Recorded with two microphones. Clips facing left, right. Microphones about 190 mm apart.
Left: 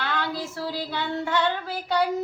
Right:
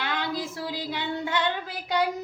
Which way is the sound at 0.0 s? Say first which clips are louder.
Left 1 dB; 15° right (ahead or behind).